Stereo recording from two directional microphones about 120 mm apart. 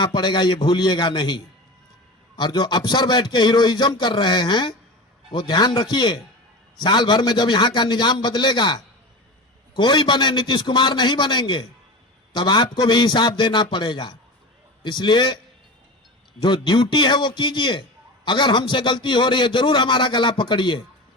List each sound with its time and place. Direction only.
0.0 s a man's voice: 35° left (ahead or behind)
16.4 s a man's voice: 40° left (ahead or behind)